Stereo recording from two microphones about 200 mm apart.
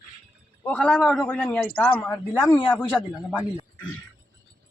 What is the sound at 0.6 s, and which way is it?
A man's voice, 5° left (ahead or behind).